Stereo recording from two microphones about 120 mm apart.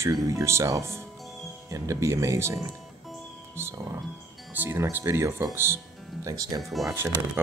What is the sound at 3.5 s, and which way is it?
Speech, 20° right (ahead or behind).